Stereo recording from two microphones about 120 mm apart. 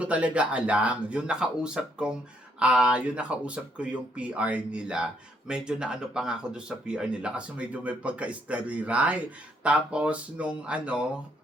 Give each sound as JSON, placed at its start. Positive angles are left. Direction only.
{"t": 0.0, "sound": "speech", "side_deg": -10}